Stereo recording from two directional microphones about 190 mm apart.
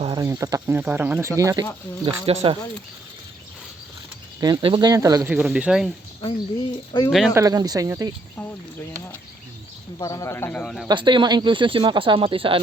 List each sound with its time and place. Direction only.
0.2 s speech: 15° right (ahead or behind)
2.2 s speech: 30° right (ahead or behind)
4.4 s speech: 20° right (ahead or behind); by 5.9 s 5° right (ahead or behind)
6.2 s speech: 25° left (ahead or behind)
7.3 s speech: 20° right (ahead or behind)
10.0 s speech: 15° left (ahead or behind)
10.8 s speech: 25° right (ahead or behind)